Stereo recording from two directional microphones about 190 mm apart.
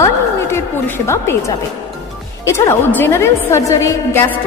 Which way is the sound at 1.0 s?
15° left (ahead or behind).